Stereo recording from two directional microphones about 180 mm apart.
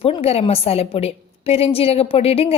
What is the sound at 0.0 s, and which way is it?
A woman's voice, 30° left (ahead or behind).